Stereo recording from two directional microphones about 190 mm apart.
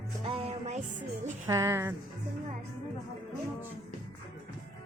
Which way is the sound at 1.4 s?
15° right (ahead or behind).